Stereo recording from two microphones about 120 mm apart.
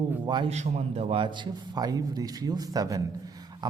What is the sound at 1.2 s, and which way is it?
A man's voice, 40° right (ahead or behind).